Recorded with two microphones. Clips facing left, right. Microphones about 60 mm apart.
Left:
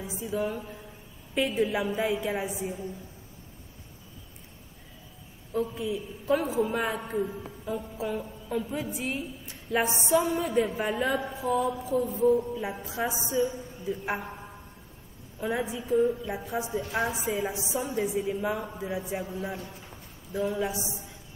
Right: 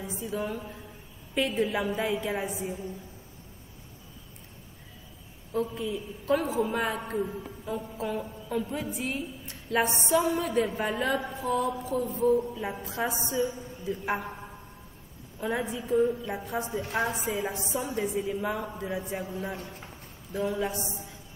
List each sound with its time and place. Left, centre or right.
0.0 s a woman's voice: centre
5.5 s a woman's voice: centre